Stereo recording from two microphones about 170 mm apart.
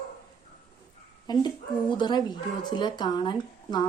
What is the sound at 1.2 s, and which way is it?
Speech, 25° left (ahead or behind).